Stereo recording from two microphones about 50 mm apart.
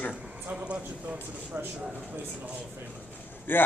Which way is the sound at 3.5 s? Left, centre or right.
Left.